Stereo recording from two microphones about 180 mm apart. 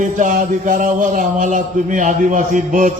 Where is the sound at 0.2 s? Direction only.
45° right (ahead or behind).